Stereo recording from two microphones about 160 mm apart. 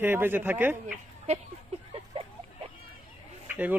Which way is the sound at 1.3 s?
40° right (ahead or behind).